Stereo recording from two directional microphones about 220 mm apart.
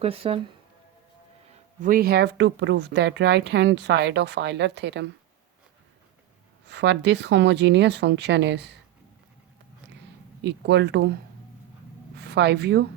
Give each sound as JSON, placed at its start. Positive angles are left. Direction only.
{"t": 0.0, "sound": "speech", "side_deg": -25}
{"t": 1.8, "sound": "a woman's voice", "side_deg": -40}
{"t": 6.7, "sound": "a woman's voice", "side_deg": -55}
{"t": 10.4, "sound": "a woman's voice", "side_deg": -50}